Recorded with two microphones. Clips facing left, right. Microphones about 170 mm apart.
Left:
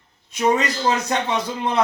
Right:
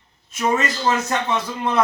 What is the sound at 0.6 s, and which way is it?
A man's voice, 15° left (ahead or behind).